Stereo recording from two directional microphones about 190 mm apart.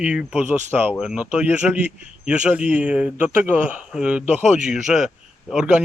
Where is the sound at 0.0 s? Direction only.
5° right (ahead or behind).